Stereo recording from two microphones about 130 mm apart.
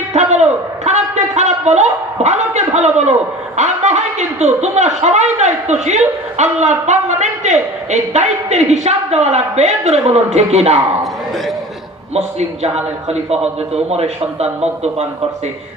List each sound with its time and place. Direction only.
0.1 s a man's voice: 60° right (ahead or behind)
0.9 s a sound: 60° right (ahead or behind)
3.6 s a man's voice: 65° right (ahead or behind)
12.1 s a man's voice: 55° right (ahead or behind)